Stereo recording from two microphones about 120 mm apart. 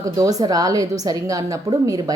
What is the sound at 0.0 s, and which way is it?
A woman's voice, 30° right (ahead or behind).